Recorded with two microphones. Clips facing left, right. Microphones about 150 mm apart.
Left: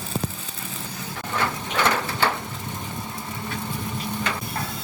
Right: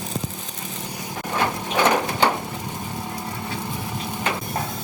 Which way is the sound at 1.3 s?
15° right (ahead or behind).